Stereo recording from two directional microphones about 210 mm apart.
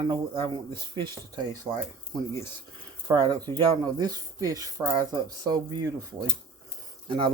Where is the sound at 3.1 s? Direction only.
20° right (ahead or behind).